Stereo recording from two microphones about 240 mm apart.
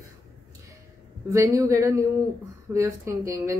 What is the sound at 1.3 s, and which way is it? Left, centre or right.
Speech, centre.